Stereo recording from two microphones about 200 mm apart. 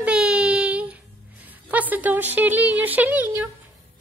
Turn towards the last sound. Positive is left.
turn(degrees=-10)  # may be behind; listen again after turning